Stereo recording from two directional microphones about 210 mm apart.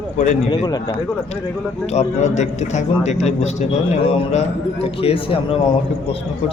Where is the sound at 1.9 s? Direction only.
35° left (ahead or behind).